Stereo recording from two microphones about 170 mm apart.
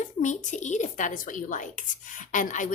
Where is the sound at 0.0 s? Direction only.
45° left (ahead or behind).